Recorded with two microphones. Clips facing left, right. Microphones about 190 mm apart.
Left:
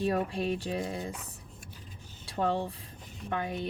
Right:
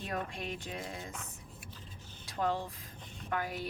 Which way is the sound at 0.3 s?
30° left (ahead or behind).